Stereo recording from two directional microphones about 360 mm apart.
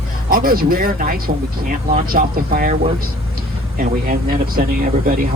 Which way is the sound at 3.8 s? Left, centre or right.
Right.